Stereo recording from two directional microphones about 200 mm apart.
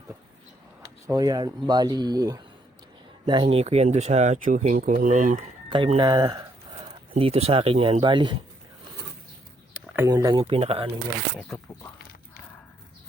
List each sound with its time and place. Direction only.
1.0 s speech: 20° right (ahead or behind); by 5.4 s 40° right (ahead or behind)
5.7 s speech: 25° right (ahead or behind)
7.1 s speech: 30° right (ahead or behind)
9.7 s a sound: 10° right (ahead or behind)
10.1 s speech: 20° right (ahead or behind)